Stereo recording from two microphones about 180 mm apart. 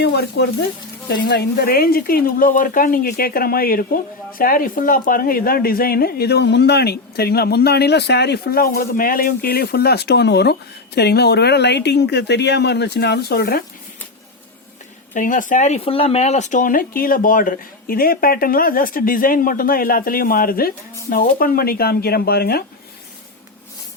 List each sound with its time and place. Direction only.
0.0 s speech: 65° left (ahead or behind)
15.1 s speech: 45° left (ahead or behind)